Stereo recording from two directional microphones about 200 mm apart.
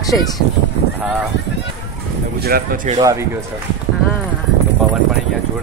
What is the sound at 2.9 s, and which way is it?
Speech, 15° right (ahead or behind).